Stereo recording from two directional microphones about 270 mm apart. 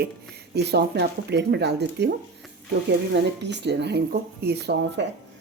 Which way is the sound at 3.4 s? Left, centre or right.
Right.